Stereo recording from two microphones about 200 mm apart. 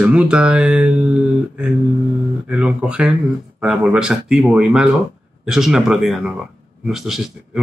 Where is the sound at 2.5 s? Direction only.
5° right (ahead or behind).